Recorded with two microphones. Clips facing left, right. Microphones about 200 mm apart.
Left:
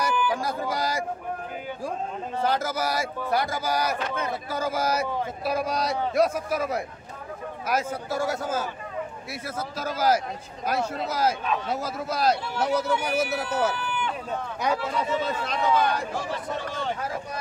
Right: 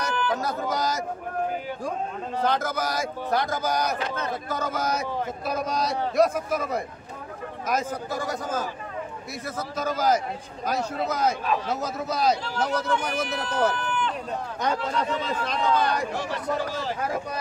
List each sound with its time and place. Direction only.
0.0 s speech: 10° left (ahead or behind)
2.4 s speech: 5° left (ahead or behind)
9.8 s speech: 5° left (ahead or behind)